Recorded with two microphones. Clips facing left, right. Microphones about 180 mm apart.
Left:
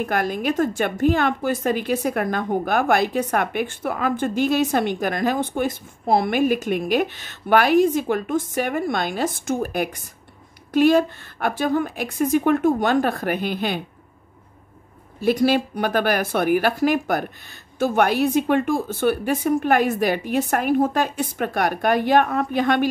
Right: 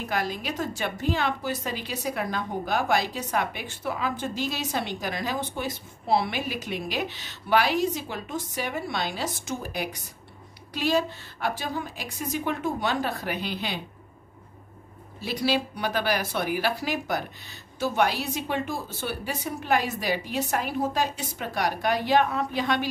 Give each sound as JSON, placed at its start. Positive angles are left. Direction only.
{"t": 0.0, "sound": "a woman's voice", "side_deg": 55}
{"t": 15.1, "sound": "a woman's voice", "side_deg": 50}